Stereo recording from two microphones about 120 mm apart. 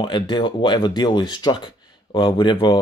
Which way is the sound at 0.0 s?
40° left (ahead or behind).